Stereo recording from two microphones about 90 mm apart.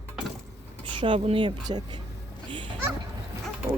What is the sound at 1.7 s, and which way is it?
Speech, 50° right (ahead or behind).